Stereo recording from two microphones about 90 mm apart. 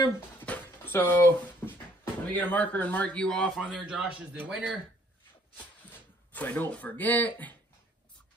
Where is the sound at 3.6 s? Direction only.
5° right (ahead or behind).